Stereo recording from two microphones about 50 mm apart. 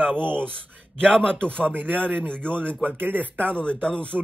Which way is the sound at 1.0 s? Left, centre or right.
Centre.